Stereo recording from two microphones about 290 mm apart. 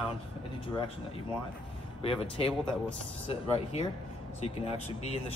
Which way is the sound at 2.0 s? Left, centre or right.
Centre.